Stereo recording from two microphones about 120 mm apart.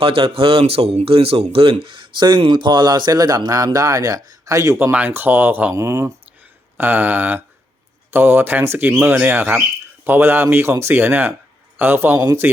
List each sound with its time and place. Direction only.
0.0 s speech: 50° right (ahead or behind); by 4.9 s 25° right (ahead or behind)
4.9 s a man's voice: 15° right (ahead or behind)